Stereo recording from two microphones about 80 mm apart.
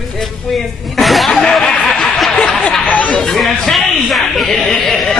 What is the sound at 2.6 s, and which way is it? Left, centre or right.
Speech, centre.